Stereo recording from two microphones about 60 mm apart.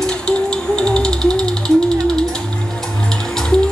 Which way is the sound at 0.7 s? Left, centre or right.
Centre.